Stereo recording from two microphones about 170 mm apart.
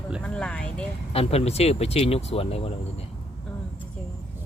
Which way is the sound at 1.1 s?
35° left (ahead or behind).